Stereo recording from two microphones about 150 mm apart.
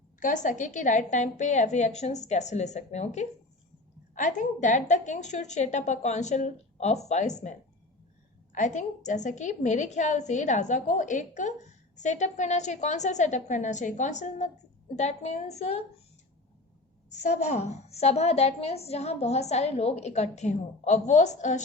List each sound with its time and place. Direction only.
0.2 s a woman's voice: 55° left (ahead or behind)
17.1 s a woman's voice: 50° left (ahead or behind)